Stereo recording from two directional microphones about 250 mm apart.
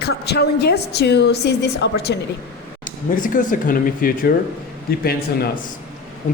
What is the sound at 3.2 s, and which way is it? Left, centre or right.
A woman's voice, left.